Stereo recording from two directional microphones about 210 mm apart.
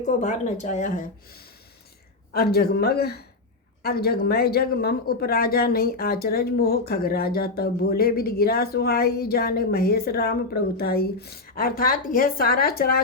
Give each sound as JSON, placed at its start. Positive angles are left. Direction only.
{"t": 0.0, "sound": "speech", "side_deg": 35}